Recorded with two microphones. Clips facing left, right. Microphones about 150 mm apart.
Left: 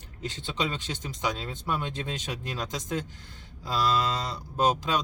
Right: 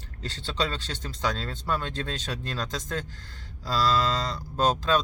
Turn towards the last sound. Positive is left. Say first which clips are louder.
# right 2 dB
turn(degrees=15)  # may be behind; listen again after turning